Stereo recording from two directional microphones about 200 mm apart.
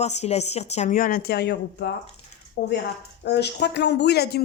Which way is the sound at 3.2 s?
55° left (ahead or behind).